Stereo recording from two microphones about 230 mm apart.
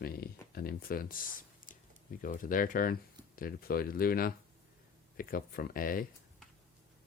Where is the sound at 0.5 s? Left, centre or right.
Left.